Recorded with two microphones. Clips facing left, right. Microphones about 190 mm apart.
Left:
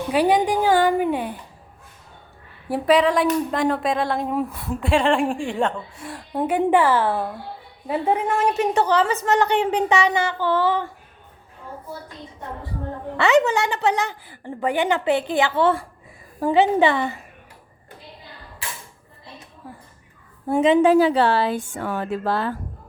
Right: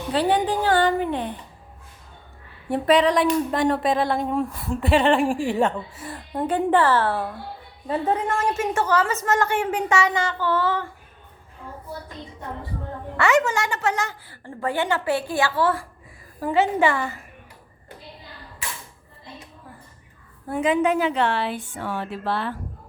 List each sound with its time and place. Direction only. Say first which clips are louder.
0.1 s child singing: left 2 dB; 10° left (ahead or behind)
2.6 s speech: left 1 dB; centre (ahead or behind)
6.4 s child singing: left 2 dB; 15° left (ahead or behind)
13.1 s a woman's voice: left 3 dB; 20° left (ahead or behind)
20.5 s a woman's voice: left 5 dB; 25° left (ahead or behind); by 22.5 s 40° left (ahead or behind)